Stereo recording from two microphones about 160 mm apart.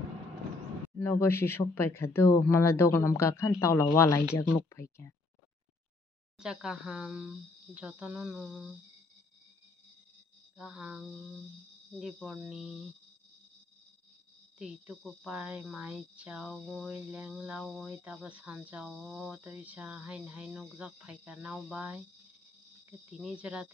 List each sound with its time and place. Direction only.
0.9 s speech: 15° left (ahead or behind)
6.4 s speech: 5° right (ahead or behind)
10.6 s speech: 5° right (ahead or behind)
14.6 s speech: 5° right (ahead or behind)
23.0 s speech: centre (ahead or behind)